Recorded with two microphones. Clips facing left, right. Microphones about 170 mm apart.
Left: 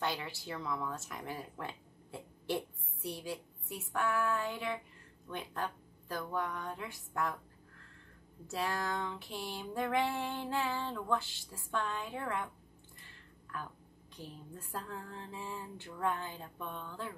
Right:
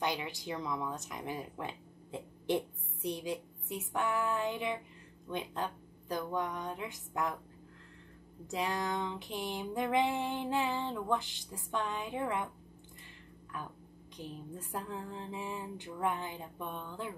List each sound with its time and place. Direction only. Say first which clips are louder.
0.0 s speech: right 2 dB; 15° right (ahead or behind)
8.5 s speech: right 2 dB; 15° right (ahead or behind)
13.5 s speech: right 1 dB; 15° right (ahead or behind)